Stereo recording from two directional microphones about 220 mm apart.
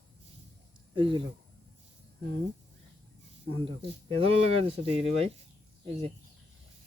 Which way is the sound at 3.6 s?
25° right (ahead or behind).